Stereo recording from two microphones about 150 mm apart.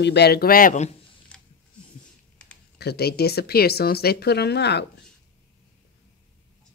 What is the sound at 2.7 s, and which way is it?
Speech, 90° left.